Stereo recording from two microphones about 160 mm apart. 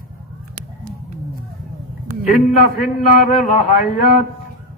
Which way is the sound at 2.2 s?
60° left (ahead or behind).